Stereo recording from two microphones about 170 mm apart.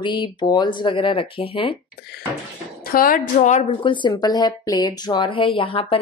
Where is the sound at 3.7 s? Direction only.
30° left (ahead or behind).